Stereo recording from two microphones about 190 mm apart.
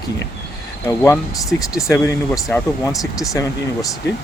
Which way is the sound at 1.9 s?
15° left (ahead or behind).